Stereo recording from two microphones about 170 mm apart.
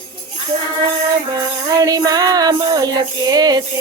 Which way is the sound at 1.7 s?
20° right (ahead or behind).